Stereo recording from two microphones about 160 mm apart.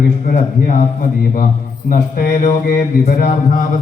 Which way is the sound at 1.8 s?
60° left (ahead or behind).